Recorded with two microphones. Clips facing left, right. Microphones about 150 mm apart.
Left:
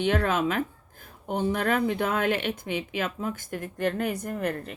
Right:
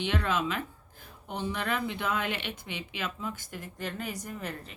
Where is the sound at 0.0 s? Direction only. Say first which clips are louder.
Left 5 dB; 50° left (ahead or behind).